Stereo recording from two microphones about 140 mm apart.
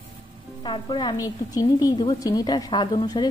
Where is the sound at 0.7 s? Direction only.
35° left (ahead or behind).